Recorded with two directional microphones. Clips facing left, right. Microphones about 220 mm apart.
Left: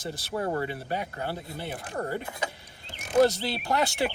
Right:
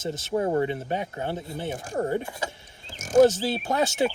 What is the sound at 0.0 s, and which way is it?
Speech, 20° right (ahead or behind).